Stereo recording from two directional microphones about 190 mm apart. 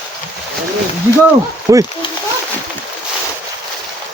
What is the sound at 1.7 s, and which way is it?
Speech, 15° right (ahead or behind).